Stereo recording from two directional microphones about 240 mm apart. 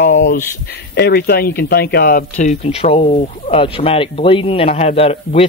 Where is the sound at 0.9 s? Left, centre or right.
Left.